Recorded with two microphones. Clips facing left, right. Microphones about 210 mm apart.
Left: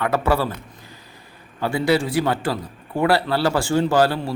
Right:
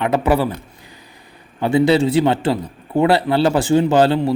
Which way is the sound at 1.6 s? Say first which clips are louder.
Right 6 dB; 20° right (ahead or behind).